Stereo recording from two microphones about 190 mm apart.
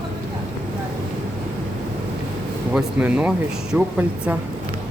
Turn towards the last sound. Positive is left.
turn(degrees=-10)  # may be behind; listen again after turning